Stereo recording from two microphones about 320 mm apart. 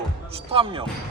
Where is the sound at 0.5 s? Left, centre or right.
Centre.